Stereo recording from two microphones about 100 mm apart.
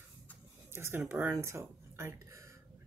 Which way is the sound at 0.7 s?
25° right (ahead or behind).